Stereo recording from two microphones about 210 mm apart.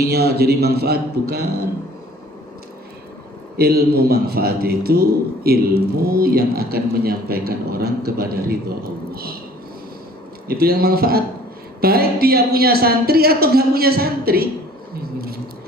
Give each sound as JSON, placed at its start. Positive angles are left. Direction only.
{"t": 0.0, "sound": "a man's voice", "side_deg": -50}
{"t": 3.6, "sound": "a man's voice", "side_deg": -50}
{"t": 10.5, "sound": "a man's voice", "side_deg": -45}